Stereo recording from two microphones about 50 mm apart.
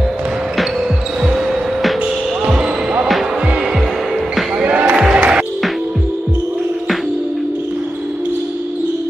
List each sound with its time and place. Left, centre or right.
1.2 s basketball bounce: centre
4.6 s music: right
4.9 s music: centre